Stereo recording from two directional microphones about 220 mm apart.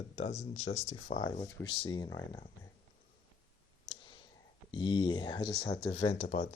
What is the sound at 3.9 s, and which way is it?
Clicking, 20° left (ahead or behind).